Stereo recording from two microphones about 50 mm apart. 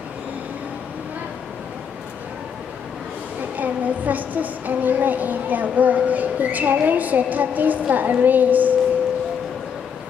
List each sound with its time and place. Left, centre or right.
3.5 s speech: right